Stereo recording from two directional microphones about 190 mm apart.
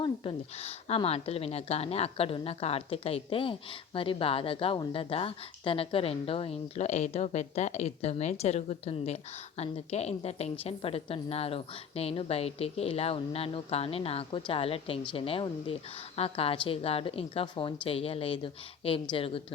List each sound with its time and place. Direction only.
0.0 s a woman's voice: 30° left (ahead or behind)